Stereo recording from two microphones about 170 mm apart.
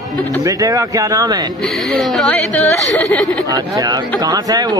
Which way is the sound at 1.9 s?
5° left (ahead or behind).